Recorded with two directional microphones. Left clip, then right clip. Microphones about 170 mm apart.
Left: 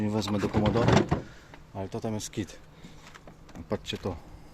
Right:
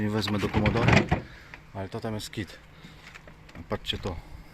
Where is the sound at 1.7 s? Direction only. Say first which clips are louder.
Even; 25° left (ahead or behind).